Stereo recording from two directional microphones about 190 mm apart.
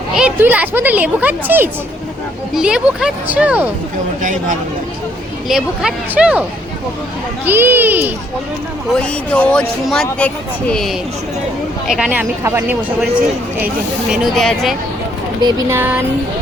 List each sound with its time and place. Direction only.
0.2 s a woman's voice: 10° right (ahead or behind)
4.2 s speech: 45° right (ahead or behind)
5.5 s speech: 5° right (ahead or behind)
7.4 s a woman's voice: 10° right (ahead or behind)
9.0 s a woman's voice: 5° left (ahead or behind); by 12.7 s 15° right (ahead or behind)
14.1 s a woman's voice: centre (ahead or behind)